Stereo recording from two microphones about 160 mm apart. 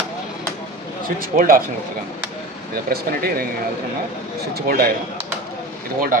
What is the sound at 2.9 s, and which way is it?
Speech, 70° right (ahead or behind).